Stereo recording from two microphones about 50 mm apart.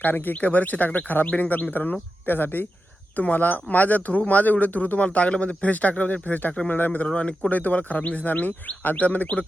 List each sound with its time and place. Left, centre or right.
0.0 s speech: left
7.1 s speech: left